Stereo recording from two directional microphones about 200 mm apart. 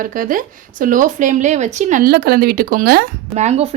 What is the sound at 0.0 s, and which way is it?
Speech, 45° right (ahead or behind).